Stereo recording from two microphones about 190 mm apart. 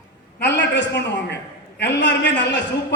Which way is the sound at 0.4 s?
65° left (ahead or behind).